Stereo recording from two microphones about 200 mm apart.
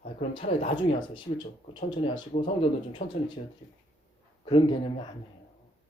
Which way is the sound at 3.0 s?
50° left (ahead or behind).